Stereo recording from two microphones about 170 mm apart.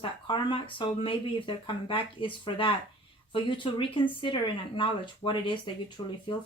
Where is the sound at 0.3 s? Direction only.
30° left (ahead or behind).